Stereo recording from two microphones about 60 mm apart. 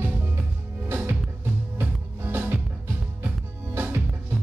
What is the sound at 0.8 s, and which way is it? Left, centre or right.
Music, right.